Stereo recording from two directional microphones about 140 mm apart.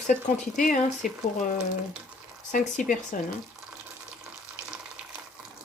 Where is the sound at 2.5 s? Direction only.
70° left (ahead or behind).